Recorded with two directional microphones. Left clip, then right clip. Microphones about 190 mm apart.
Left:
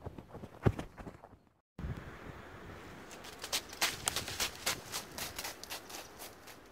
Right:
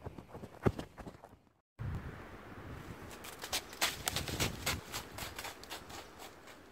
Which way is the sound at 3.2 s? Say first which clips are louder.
Left 1 dB; 35° right (ahead or behind).